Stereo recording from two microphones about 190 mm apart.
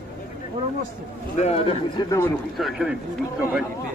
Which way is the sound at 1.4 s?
30° left (ahead or behind).